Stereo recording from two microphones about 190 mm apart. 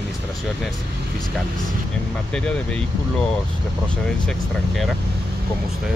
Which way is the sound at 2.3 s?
5° left (ahead or behind).